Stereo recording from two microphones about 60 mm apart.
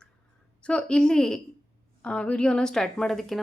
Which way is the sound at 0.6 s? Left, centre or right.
Centre.